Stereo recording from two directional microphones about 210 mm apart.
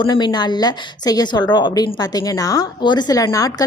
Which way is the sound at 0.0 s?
20° left (ahead or behind).